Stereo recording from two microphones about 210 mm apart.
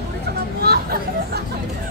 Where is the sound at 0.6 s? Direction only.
50° right (ahead or behind).